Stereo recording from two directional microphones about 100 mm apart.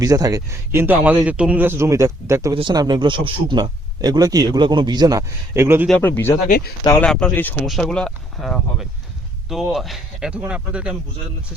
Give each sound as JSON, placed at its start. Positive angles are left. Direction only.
{"t": 0.0, "sound": "speech", "side_deg": -35}
{"t": 2.7, "sound": "speech", "side_deg": -45}
{"t": 4.5, "sound": "speech", "side_deg": -50}
{"t": 5.5, "sound": "speech", "side_deg": -25}
{"t": 6.0, "sound": "speech", "side_deg": 20}
{"t": 7.0, "sound": "speech", "side_deg": 10}
{"t": 7.6, "sound": "speech", "side_deg": 5}